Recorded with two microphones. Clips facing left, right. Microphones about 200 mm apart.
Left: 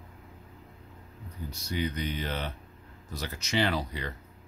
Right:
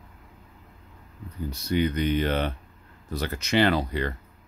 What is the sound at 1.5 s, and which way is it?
Speech, 60° right (ahead or behind).